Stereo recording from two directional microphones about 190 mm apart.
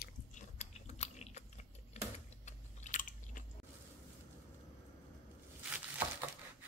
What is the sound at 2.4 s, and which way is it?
Chewing, 40° left (ahead or behind).